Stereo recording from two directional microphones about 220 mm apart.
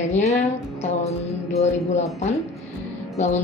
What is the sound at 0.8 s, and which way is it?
Music, 30° left (ahead or behind).